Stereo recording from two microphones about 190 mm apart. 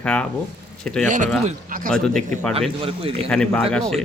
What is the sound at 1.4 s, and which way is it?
Speech, 45° right (ahead or behind).